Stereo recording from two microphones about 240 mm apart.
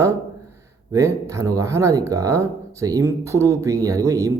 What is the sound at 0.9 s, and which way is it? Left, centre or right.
Speech, centre.